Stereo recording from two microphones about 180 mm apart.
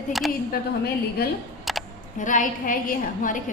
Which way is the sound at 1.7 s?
Centre (ahead or behind).